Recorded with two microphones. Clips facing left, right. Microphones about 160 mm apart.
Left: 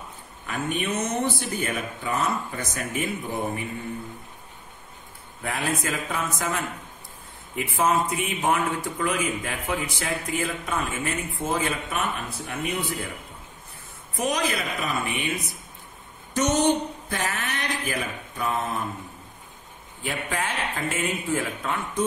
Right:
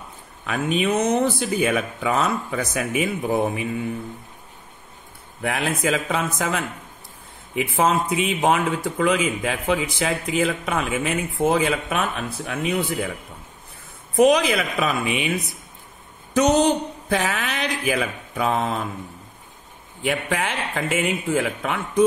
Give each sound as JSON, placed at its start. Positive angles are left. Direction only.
{"t": 0.5, "sound": "speech", "side_deg": -90}
{"t": 5.4, "sound": "speech", "side_deg": -75}
{"t": 8.5, "sound": "speech", "side_deg": -75}
{"t": 14.1, "sound": "speech", "side_deg": -80}
{"t": 17.1, "sound": "speech", "side_deg": -90}
{"t": 20.0, "sound": "speech", "side_deg": -70}